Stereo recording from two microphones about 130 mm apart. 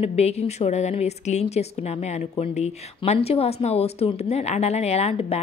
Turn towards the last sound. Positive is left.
turn(degrees=55)  # may be behind; listen again after turning